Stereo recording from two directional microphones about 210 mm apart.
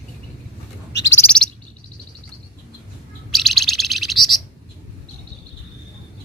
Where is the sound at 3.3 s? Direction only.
Centre (ahead or behind).